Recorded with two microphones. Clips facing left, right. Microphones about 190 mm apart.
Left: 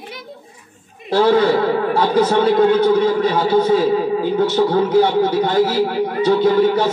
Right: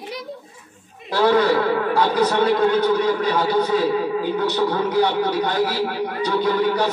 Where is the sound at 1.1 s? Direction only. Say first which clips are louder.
Left 3 dB; 25° left (ahead or behind).